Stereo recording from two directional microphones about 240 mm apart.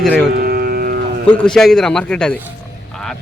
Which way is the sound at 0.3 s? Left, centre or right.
Right.